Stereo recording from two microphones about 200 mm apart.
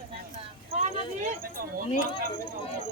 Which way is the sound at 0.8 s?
40° right (ahead or behind).